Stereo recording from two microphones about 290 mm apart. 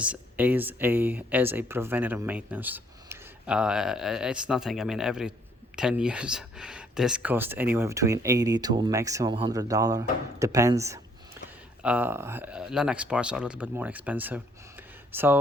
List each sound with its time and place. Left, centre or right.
0.0 s speech: centre